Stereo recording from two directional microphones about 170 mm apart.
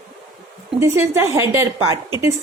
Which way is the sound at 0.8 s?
15° right (ahead or behind).